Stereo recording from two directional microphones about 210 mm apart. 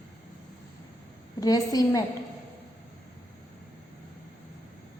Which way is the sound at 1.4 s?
15° left (ahead or behind).